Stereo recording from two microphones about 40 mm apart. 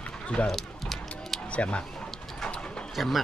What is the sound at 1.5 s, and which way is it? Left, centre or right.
Speech, left.